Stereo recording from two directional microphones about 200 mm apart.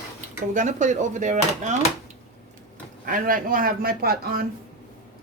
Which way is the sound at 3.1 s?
45° right (ahead or behind).